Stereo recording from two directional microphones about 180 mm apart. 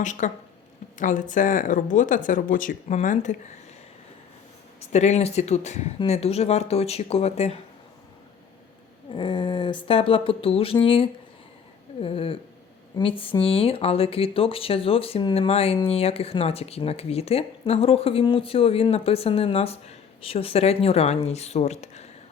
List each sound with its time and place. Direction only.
0.0 s speech: 45° left (ahead or behind)
4.8 s speech: 40° left (ahead or behind)
9.1 s a sound: 25° left (ahead or behind)
12.0 s speech: 30° left (ahead or behind)